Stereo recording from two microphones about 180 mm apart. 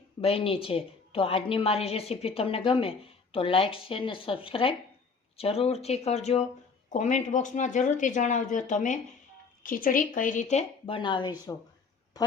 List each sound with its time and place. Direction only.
0.2 s a woman's voice: 30° left (ahead or behind)